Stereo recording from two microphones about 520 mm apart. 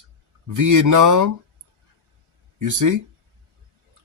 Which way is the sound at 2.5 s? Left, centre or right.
Right.